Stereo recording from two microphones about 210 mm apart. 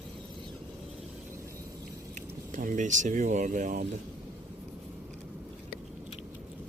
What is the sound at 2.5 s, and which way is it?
Speech, 35° right (ahead or behind).